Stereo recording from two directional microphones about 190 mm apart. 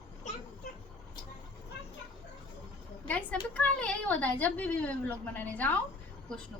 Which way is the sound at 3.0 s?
5° left (ahead or behind).